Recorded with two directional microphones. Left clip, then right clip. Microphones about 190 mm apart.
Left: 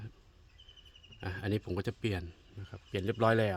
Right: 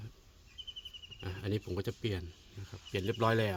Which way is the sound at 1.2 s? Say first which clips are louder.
Left 3 dB; 30° left (ahead or behind).